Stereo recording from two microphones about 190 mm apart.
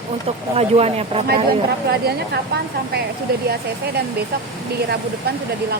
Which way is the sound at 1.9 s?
55° right (ahead or behind).